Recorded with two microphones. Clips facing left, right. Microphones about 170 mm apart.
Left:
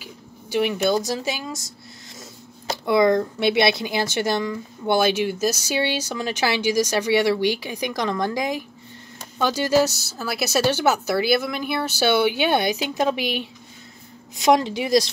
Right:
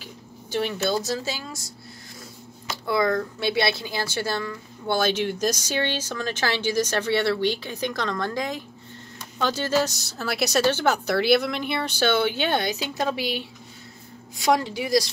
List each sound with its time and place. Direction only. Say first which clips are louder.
0.0 s speech: left 1 dB; 10° left (ahead or behind)
2.9 s a woman's voice: left 5 dB; 20° left (ahead or behind)